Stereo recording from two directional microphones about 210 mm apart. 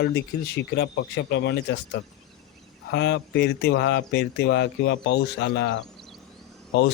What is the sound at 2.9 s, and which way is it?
Speech, 55° left (ahead or behind).